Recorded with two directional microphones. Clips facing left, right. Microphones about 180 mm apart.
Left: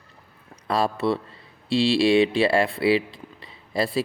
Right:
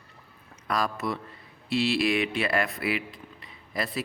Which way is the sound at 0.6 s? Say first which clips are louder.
Left 6 dB; 30° left (ahead or behind).